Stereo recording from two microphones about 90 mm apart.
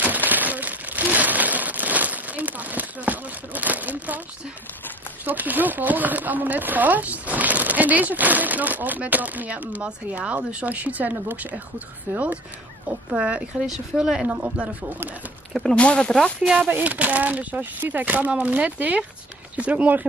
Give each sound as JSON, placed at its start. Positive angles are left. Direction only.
{"t": 0.0, "sound": "a sound", "side_deg": -20}
{"t": 5.2, "sound": "speech", "side_deg": -20}
{"t": 14.2, "sound": "speech", "side_deg": -20}
{"t": 15.5, "sound": "speech", "side_deg": 10}
{"t": 16.6, "sound": "speech", "side_deg": -20}